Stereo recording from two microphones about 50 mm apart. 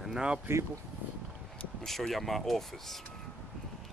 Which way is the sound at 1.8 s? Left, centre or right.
Centre.